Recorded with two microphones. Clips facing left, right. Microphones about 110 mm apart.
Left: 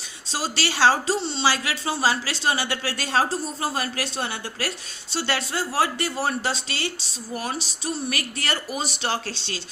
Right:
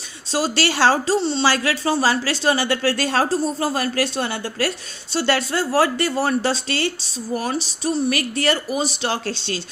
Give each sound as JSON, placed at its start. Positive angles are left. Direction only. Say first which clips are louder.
{"t": 0.6, "sound": "a woman's voice", "louder": "right 1 dB", "side_deg": -45}
{"t": 8.1, "sound": "a woman's voice", "louder": "right 8 dB", "side_deg": -35}